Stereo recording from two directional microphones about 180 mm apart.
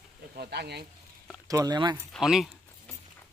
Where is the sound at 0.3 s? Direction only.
65° right (ahead or behind).